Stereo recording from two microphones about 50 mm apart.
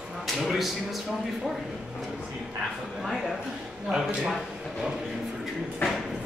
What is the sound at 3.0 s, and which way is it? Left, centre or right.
Music, centre.